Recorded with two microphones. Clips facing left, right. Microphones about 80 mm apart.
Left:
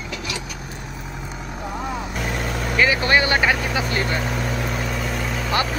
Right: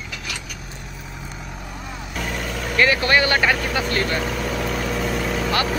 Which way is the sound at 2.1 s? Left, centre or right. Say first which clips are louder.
Left 2 dB; left.